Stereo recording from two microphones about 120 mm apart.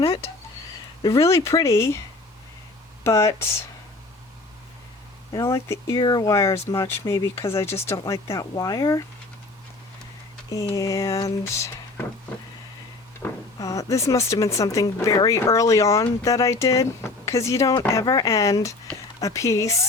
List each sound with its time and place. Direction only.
1.0 s speech: 25° left (ahead or behind)
3.0 s speech: 25° left (ahead or behind)
5.3 s speech: 25° left (ahead or behind)
6.0 s speech: 35° left (ahead or behind)
10.8 s speech: 25° left (ahead or behind)
13.2 s vehicle: 15° left (ahead or behind)
13.6 s speech: 25° left (ahead or behind)